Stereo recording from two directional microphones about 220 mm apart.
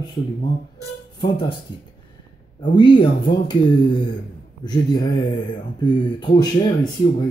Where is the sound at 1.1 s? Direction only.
25° left (ahead or behind).